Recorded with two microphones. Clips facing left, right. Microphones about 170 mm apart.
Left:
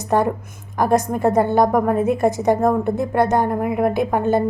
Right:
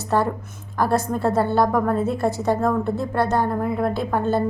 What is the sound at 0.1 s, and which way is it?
A woman's voice, 15° left (ahead or behind).